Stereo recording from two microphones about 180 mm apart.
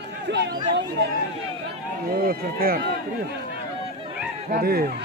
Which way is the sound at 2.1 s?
55° right (ahead or behind).